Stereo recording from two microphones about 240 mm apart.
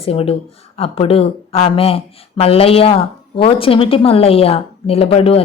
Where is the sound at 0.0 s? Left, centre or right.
Left.